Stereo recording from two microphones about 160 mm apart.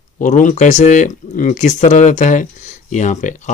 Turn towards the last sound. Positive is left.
turn(degrees=50)  # may be behind; listen again after turning